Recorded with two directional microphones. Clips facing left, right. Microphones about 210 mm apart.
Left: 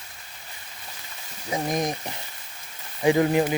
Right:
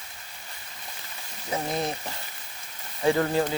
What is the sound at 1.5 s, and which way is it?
Speech, 15° left (ahead or behind).